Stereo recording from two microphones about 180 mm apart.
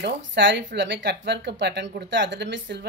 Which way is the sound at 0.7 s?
70° right (ahead or behind).